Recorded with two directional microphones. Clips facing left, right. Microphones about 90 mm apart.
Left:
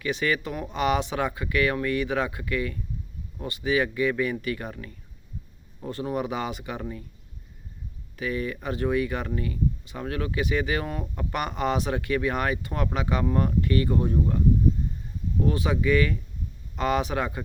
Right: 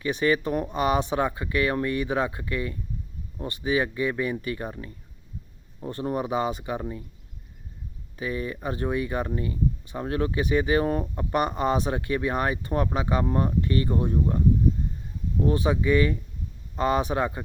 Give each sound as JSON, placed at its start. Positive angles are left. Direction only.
{"t": 0.0, "sound": "speech", "side_deg": -30}
{"t": 8.1, "sound": "speech", "side_deg": -25}
{"t": 15.4, "sound": "speech", "side_deg": -25}